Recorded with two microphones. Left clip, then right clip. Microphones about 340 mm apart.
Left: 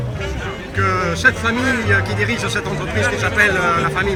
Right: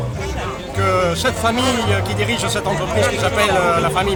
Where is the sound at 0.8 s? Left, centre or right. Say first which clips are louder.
Even; centre.